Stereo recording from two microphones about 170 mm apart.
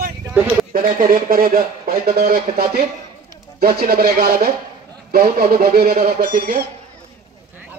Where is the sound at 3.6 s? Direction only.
65° right (ahead or behind).